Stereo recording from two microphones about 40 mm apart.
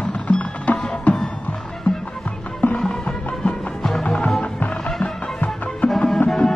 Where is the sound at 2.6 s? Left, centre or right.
Left.